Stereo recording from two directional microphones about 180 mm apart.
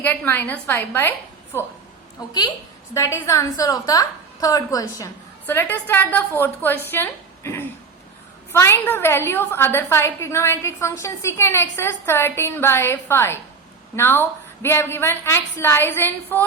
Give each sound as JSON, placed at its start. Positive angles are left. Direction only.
{"t": 0.0, "sound": "a woman's voice", "side_deg": 10}
{"t": 6.9, "sound": "a sound", "side_deg": 15}
{"t": 8.5, "sound": "a woman's voice", "side_deg": 15}